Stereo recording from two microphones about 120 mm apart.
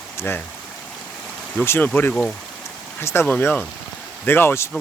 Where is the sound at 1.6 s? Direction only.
20° left (ahead or behind).